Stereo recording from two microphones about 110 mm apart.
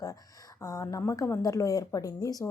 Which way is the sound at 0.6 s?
25° left (ahead or behind).